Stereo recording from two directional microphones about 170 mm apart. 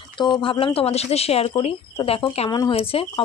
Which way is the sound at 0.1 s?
25° left (ahead or behind).